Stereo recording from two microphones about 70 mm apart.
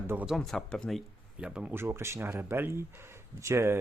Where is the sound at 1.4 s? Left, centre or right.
Centre.